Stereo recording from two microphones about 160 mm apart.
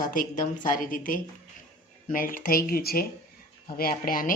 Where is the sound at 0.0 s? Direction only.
55° left (ahead or behind).